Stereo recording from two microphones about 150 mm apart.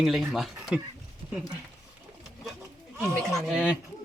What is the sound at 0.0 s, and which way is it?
Speech, centre (ahead or behind).